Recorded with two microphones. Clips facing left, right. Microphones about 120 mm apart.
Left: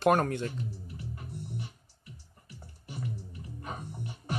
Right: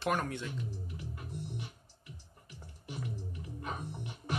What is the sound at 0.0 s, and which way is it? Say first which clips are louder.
Speech: left 8 dB; 45° left (ahead or behind).